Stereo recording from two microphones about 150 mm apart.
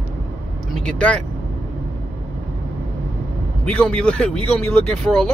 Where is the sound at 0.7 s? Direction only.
5° left (ahead or behind).